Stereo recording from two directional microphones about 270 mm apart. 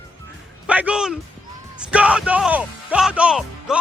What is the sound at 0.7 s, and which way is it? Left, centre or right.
Speech, centre.